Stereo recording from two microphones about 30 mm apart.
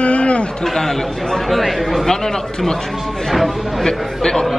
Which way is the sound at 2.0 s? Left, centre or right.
Centre.